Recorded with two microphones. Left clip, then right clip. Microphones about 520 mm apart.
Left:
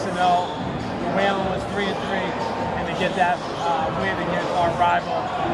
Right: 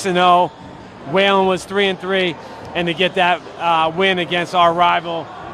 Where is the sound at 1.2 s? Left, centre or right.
Right.